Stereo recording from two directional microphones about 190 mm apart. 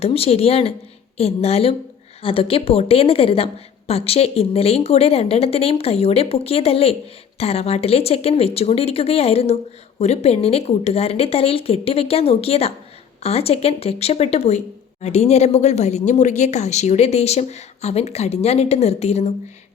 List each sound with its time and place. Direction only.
0.0 s a woman's voice: 30° left (ahead or behind)